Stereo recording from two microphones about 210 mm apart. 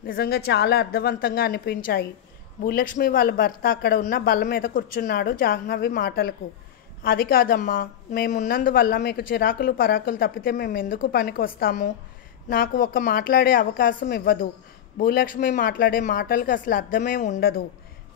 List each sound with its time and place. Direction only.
0.0 s a woman's voice: 45° left (ahead or behind)